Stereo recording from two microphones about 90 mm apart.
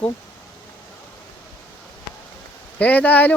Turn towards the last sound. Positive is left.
turn(degrees=15)  # may be behind; listen again after turning